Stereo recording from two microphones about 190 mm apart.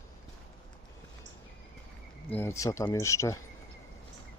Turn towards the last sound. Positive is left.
turn(degrees=15)  # may be behind; listen again after turning